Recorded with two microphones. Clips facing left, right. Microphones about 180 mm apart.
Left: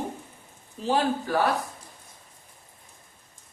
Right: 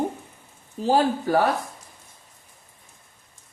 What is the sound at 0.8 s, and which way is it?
Speech, 45° right (ahead or behind).